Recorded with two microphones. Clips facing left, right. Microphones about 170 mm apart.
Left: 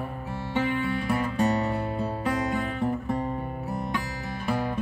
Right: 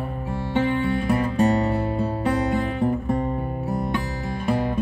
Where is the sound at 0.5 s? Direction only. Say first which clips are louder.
Right 5 dB; 30° right (ahead or behind).